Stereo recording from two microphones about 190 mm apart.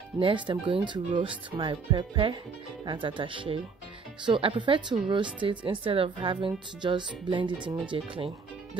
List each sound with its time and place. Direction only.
0.2 s speech: 25° right (ahead or behind)